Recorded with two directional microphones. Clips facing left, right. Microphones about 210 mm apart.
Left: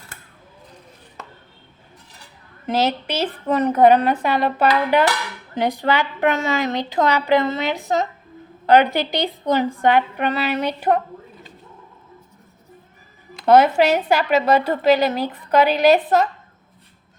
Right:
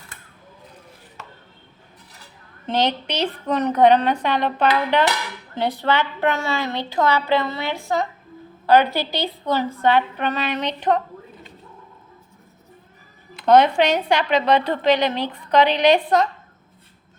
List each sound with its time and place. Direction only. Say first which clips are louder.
2.6 s speech: left 1 dB; 5° left (ahead or behind)
13.4 s speech: left 1 dB; 5° left (ahead or behind)